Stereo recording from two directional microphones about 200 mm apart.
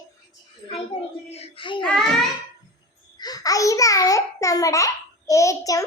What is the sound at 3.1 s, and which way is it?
A child's voice, 20° left (ahead or behind).